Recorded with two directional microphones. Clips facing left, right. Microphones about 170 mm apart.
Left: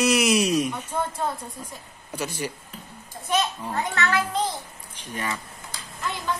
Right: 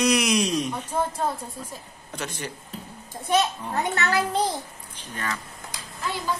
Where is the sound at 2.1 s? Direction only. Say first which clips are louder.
Left 4 dB; 10° left (ahead or behind).